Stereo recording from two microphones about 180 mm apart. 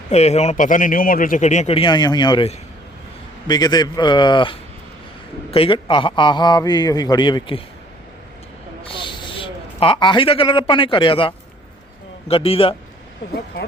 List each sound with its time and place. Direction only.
0.1 s a man's voice: 35° left (ahead or behind)
8.8 s a man's voice: 25° left (ahead or behind)